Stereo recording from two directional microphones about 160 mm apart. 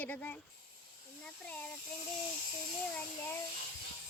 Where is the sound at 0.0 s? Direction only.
10° left (ahead or behind).